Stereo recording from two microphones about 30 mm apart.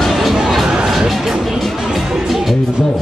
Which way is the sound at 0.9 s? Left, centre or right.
Centre.